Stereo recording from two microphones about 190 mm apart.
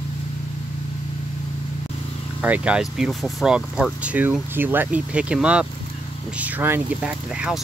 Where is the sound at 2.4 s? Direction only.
5° right (ahead or behind).